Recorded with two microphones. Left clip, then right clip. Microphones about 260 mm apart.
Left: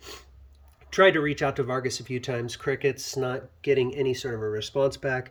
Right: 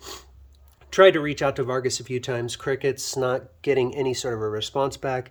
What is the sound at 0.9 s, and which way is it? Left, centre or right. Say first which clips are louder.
Speech: right 4 dB; centre.